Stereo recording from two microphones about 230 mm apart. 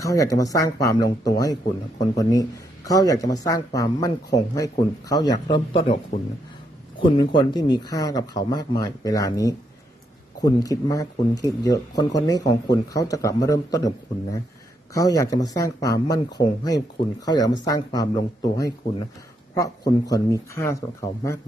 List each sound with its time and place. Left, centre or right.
0.0 s speech: centre
7.0 s speech: centre